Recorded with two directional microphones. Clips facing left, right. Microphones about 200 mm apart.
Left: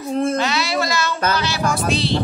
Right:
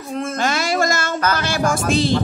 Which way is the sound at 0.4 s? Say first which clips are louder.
Right 1 dB; 50° right (ahead or behind).